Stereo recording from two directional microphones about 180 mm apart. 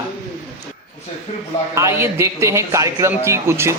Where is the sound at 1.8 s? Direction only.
15° right (ahead or behind).